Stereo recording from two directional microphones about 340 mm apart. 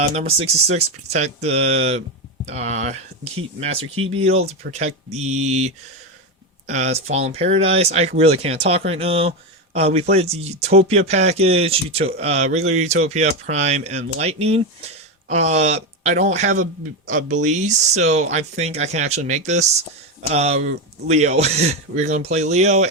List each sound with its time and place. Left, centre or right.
0.2 s speech: centre